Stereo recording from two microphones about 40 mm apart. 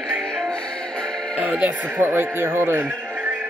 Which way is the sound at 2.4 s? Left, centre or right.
Right.